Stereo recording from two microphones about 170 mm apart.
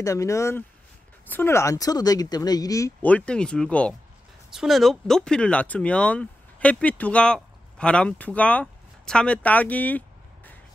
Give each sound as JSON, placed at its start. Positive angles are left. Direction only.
{"t": 0.0, "sound": "speech", "side_deg": 20}
{"t": 3.1, "sound": "speech", "side_deg": 5}